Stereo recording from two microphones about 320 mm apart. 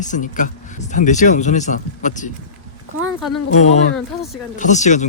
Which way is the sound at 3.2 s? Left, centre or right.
Centre.